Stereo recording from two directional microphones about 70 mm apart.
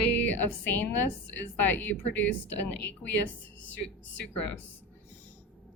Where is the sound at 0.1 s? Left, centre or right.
Left.